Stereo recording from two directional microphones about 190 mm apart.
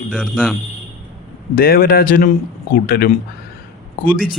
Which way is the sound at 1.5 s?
50° left (ahead or behind).